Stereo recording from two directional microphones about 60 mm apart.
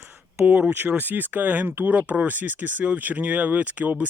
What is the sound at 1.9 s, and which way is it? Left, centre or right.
Speech, right.